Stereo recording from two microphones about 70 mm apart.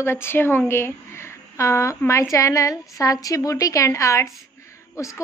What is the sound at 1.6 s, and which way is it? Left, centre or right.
A woman's voice, left.